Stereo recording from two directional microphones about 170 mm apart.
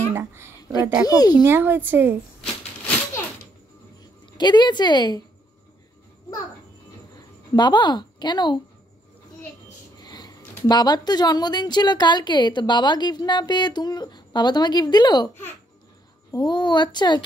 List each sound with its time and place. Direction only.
0.1 s a child's voice: 15° right (ahead or behind)
1.0 s speech: 20° left (ahead or behind)
1.3 s a woman's voice: 10° right (ahead or behind)
4.3 s speech: 25° left (ahead or behind)
7.5 s speech: 25° left (ahead or behind)
9.9 s speech: 25° left (ahead or behind)